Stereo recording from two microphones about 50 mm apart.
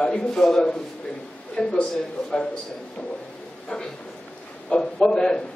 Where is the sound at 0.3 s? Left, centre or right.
Centre.